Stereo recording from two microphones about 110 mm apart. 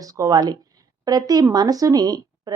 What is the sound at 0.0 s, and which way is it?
Speech, 30° right (ahead or behind).